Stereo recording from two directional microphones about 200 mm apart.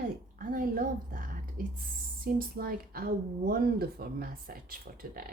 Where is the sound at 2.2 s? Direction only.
45° right (ahead or behind).